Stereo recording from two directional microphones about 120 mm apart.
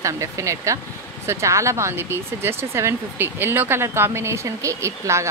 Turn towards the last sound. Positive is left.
turn(degrees=-25)  # may be behind; listen again after turning